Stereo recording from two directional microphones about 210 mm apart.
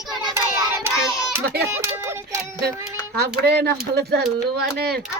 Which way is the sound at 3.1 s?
50° right (ahead or behind).